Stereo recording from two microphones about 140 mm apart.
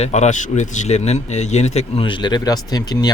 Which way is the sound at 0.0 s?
55° left (ahead or behind).